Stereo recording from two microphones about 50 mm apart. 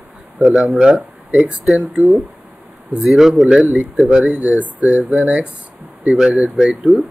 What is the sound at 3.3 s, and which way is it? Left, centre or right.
Speech, centre.